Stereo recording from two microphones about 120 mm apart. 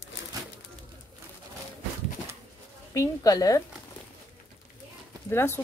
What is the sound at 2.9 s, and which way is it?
Speech, 25° left (ahead or behind).